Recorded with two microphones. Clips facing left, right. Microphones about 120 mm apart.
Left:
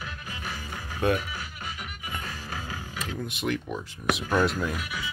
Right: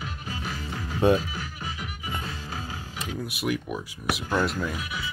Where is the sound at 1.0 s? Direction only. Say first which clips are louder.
Right 5 dB; 25° right (ahead or behind).